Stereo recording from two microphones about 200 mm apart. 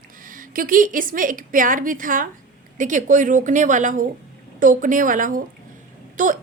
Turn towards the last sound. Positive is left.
turn(degrees=-40)  # may be behind; listen again after turning